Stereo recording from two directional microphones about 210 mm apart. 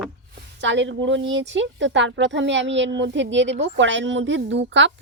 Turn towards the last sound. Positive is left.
turn(degrees=-60)  # may be behind; listen again after turning